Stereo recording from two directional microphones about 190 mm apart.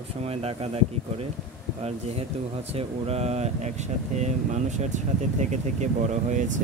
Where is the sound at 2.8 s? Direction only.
35° right (ahead or behind).